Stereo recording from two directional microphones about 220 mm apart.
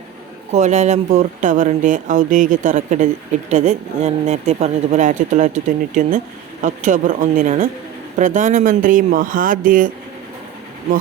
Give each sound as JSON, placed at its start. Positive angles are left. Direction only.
{"t": 0.5, "sound": "speech", "side_deg": -30}